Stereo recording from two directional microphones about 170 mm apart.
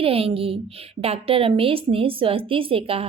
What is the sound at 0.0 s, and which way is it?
A woman's voice, 35° right (ahead or behind).